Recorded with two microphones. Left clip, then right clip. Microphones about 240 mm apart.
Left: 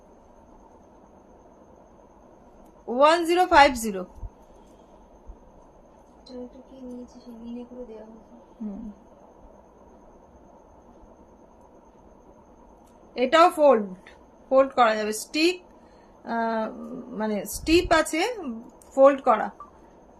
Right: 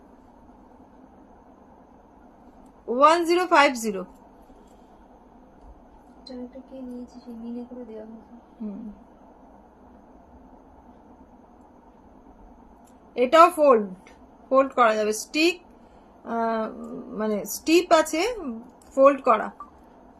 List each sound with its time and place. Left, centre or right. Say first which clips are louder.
2.9 s a woman's voice: right 1 dB; centre
13.1 s a woman's voice: right 2 dB; centre